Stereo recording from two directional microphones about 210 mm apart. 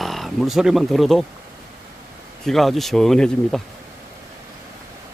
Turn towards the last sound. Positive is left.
turn(degrees=0)  # may be behind; listen again after turning